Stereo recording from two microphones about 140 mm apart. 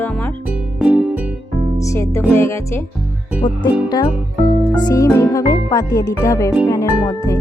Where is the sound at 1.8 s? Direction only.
20° left (ahead or behind).